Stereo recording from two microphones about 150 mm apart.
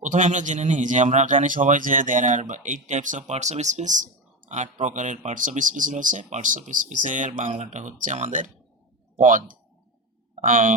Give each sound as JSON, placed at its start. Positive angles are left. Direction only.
{"t": 0.0, "sound": "speech", "side_deg": -55}